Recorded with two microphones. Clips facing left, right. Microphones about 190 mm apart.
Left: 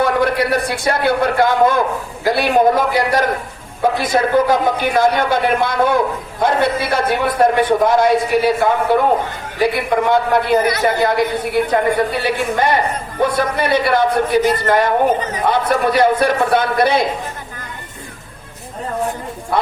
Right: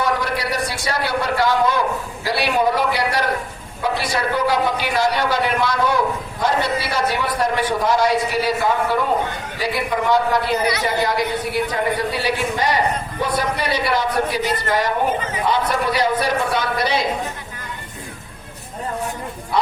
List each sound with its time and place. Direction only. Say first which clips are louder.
0.0 s a man's voice: left 6 dB; 55° left (ahead or behind)